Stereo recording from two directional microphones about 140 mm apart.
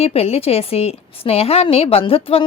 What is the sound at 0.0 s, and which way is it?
A woman's voice, 45° left (ahead or behind).